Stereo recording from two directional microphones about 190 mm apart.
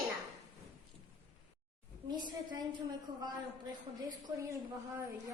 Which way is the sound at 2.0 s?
20° right (ahead or behind).